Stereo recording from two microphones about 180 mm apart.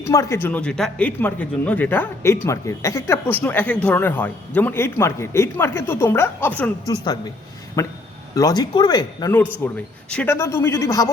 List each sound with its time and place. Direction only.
0.0 s speech: 15° left (ahead or behind)
6.8 s speech: 20° left (ahead or behind)
9.6 s speech: 10° left (ahead or behind)